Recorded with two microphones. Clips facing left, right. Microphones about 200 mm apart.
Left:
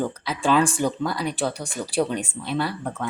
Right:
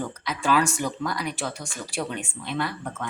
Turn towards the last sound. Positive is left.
turn(degrees=35)  # may be behind; listen again after turning